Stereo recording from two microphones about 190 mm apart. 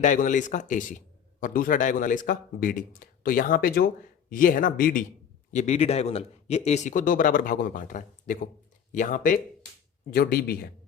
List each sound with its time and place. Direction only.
0.0 s a man's voice: 40° left (ahead or behind)
5.5 s a man's voice: 35° left (ahead or behind)
10.2 s speech: 55° left (ahead or behind)